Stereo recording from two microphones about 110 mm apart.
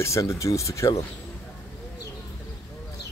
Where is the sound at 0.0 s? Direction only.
25° left (ahead or behind).